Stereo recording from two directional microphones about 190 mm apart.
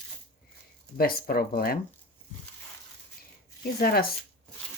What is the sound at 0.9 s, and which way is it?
Speech, 50° left (ahead or behind).